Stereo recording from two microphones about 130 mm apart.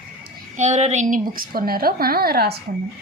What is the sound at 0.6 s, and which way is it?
Speech, 65° right (ahead or behind).